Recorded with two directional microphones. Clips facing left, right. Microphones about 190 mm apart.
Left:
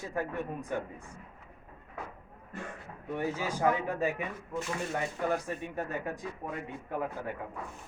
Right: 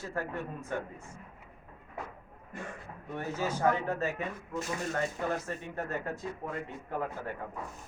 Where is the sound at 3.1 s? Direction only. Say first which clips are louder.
Left 1 dB; 15° left (ahead or behind).